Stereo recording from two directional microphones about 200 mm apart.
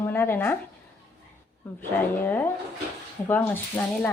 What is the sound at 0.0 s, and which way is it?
Speech, 10° left (ahead or behind).